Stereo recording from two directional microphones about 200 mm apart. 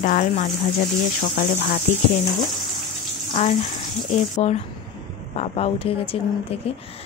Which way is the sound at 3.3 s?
35° left (ahead or behind).